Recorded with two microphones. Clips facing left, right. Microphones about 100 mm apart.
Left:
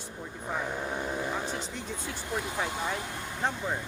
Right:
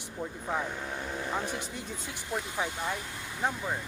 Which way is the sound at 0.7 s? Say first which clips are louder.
Left 4 dB; 20° left (ahead or behind).